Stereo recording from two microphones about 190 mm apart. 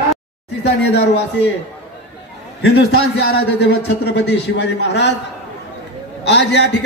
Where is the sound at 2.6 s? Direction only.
60° left (ahead or behind).